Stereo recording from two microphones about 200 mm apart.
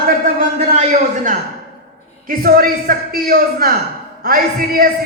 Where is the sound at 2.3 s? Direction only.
45° right (ahead or behind).